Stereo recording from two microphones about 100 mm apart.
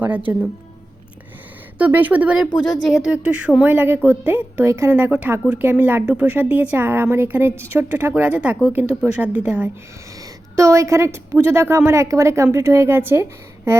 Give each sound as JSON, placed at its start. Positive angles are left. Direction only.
{"t": 1.8, "sound": "speech", "side_deg": -15}
{"t": 2.6, "sound": "speech", "side_deg": 5}
{"t": 3.0, "sound": "a woman's voice", "side_deg": -10}
{"t": 4.9, "sound": "speech", "side_deg": -15}
{"t": 10.5, "sound": "a woman's voice", "side_deg": -30}